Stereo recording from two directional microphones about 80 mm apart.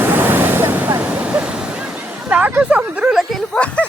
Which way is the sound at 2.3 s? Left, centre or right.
Right.